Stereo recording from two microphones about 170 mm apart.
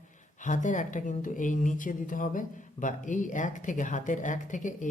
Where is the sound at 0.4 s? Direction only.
50° left (ahead or behind).